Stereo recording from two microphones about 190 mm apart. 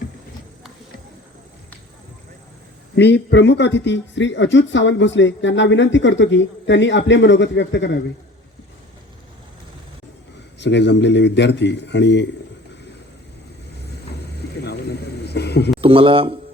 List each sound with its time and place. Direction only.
2.9 s a man's voice: 65° left (ahead or behind)
10.6 s a man's voice: 65° left (ahead or behind)
14.6 s a sound: 60° left (ahead or behind)
15.8 s speech: 30° right (ahead or behind)